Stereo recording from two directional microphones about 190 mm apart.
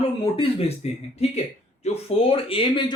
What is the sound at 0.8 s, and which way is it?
Speech, 35° left (ahead or behind).